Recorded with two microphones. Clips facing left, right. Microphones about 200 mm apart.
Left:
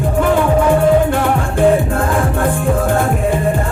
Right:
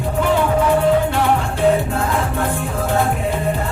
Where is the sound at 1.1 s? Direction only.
50° left (ahead or behind).